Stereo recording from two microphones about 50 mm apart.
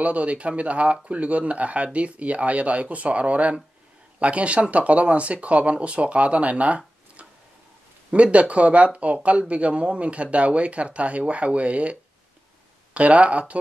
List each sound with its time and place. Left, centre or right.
0.0 s speech: right
7.2 s a sound: right
8.1 s speech: right